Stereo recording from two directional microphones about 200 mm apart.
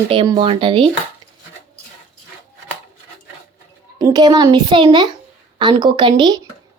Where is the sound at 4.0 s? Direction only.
20° right (ahead or behind).